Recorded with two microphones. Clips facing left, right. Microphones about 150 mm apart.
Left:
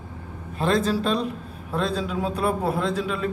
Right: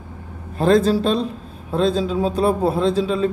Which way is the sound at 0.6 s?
35° right (ahead or behind).